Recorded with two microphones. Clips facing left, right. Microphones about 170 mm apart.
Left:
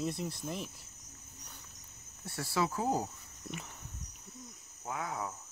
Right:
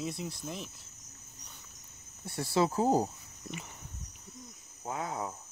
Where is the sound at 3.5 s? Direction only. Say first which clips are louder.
Right 1 dB; centre (ahead or behind).